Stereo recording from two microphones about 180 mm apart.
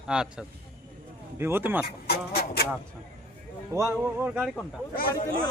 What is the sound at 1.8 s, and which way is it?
Speech, 60° left (ahead or behind).